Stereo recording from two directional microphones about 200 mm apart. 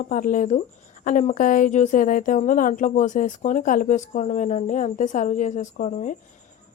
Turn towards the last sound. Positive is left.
turn(degrees=35)  # may be behind; listen again after turning